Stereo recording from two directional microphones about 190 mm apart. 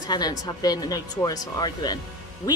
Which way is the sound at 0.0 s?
20° left (ahead or behind).